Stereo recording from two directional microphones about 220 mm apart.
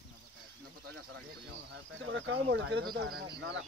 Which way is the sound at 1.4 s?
60° right (ahead or behind).